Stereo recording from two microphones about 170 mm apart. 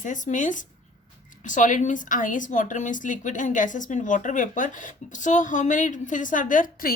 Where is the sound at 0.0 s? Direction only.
50° left (ahead or behind).